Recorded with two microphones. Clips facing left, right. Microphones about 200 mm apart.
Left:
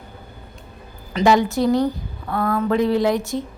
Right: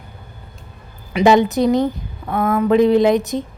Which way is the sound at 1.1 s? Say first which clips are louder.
Right 4 dB; 20° right (ahead or behind).